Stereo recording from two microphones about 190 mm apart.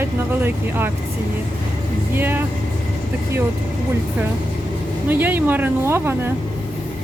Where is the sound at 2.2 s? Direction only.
10° right (ahead or behind).